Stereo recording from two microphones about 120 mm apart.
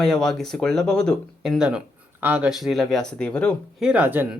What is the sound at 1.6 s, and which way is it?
Speech, 10° right (ahead or behind).